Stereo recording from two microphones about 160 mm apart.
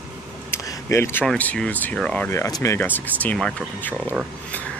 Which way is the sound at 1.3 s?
5° left (ahead or behind).